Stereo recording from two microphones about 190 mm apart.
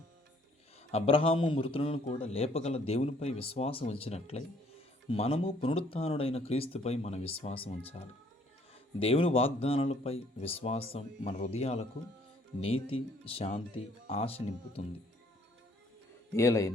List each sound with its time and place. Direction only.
0.9 s a man's voice: 30° left (ahead or behind)
9.0 s a man's voice: 30° left (ahead or behind)
16.3 s speech: 15° left (ahead or behind)